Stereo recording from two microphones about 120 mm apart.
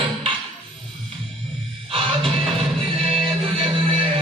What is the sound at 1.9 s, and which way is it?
Music, 50° right (ahead or behind).